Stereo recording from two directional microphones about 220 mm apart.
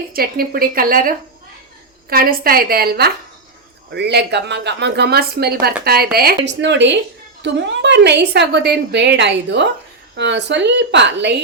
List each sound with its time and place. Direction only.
0.1 s a woman's voice: 40° right (ahead or behind)